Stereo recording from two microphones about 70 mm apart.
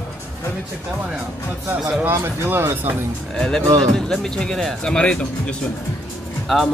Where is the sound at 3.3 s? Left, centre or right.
Centre.